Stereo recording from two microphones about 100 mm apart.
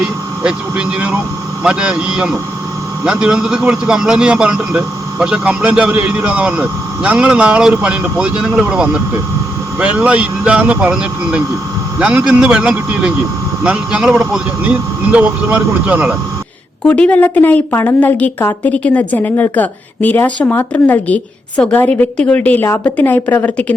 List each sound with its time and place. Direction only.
0.0 s speech: 10° right (ahead or behind)
16.8 s a woman's voice: 10° left (ahead or behind)